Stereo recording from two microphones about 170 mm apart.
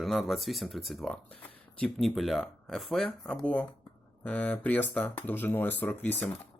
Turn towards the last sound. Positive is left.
turn(degrees=10)  # may be behind; listen again after turning